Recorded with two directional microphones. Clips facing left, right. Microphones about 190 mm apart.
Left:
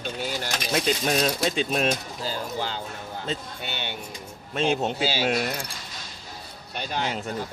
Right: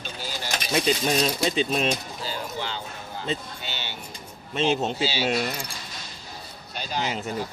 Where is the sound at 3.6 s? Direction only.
60° left (ahead or behind).